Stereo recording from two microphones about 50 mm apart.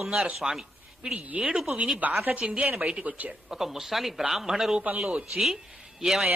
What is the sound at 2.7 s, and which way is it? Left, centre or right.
Speech, right.